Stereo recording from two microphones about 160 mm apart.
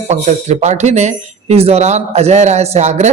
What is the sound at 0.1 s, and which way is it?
Speech, 45° right (ahead or behind).